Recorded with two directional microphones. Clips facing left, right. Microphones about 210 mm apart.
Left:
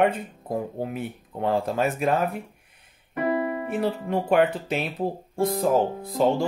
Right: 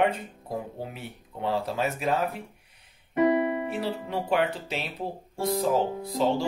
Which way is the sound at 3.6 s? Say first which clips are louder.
Left 4 dB; 50° left (ahead or behind).